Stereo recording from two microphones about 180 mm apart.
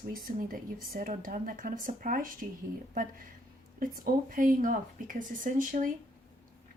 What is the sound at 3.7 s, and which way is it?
Speech, 55° right (ahead or behind).